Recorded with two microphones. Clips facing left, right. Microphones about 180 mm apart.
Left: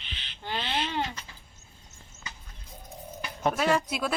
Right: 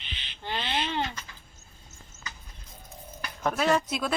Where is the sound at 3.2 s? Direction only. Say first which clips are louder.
Left 2 dB; 20° left (ahead or behind).